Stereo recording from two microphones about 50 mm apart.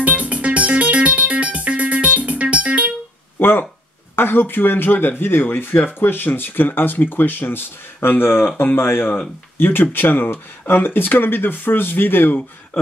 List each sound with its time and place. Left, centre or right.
0.0 s music: right
3.3 s a sound: left
4.1 s speech: left